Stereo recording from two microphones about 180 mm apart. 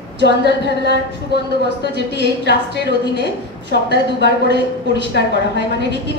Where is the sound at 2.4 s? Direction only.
70° left (ahead or behind).